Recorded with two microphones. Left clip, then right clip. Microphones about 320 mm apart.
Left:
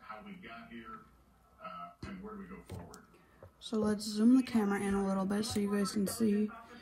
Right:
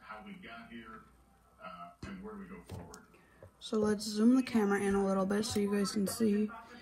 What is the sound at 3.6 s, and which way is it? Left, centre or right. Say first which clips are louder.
Speech: right 2 dB; centre.